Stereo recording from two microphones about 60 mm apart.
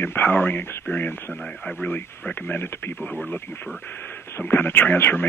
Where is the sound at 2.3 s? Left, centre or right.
Left.